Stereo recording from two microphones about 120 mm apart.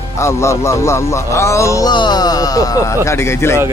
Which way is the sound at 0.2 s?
25° left (ahead or behind).